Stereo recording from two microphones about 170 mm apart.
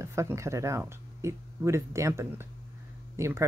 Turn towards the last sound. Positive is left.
turn(degrees=-15)  # may be behind; listen again after turning